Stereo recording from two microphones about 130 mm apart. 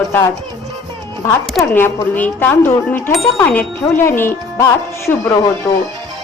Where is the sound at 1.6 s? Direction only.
15° left (ahead or behind).